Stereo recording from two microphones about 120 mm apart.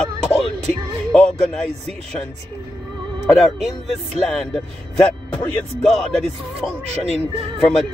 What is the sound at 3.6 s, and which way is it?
Music, 65° right (ahead or behind).